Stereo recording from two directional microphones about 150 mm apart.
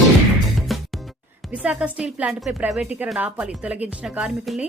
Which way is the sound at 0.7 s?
Centre (ahead or behind).